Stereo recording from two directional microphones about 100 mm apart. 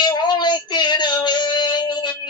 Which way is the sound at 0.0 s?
45° left (ahead or behind).